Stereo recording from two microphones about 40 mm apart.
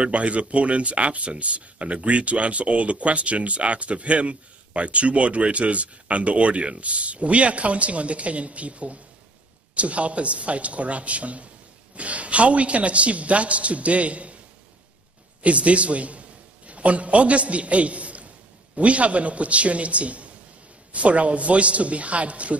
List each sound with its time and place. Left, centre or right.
0.0 s speech: right
15.4 s a man's voice: right